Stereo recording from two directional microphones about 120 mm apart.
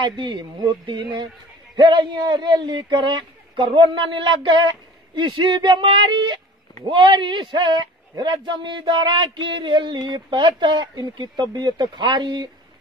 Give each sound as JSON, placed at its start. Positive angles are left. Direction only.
{"t": 0.0, "sound": "speech", "side_deg": -40}